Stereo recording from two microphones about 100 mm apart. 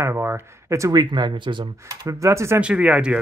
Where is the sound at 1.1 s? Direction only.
50° right (ahead or behind).